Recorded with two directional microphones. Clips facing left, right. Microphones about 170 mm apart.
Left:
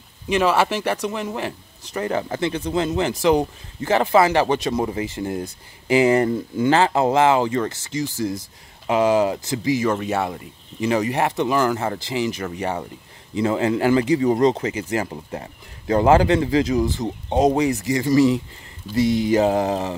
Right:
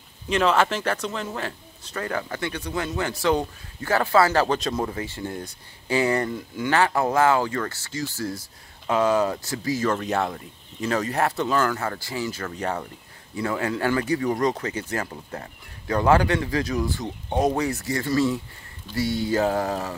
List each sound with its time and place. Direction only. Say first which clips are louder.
0.3 s speech: left 2 dB; 10° left (ahead or behind)
13.3 s speech: left 6 dB; 20° left (ahead or behind)